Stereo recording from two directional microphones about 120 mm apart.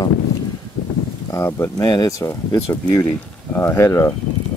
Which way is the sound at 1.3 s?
20° left (ahead or behind).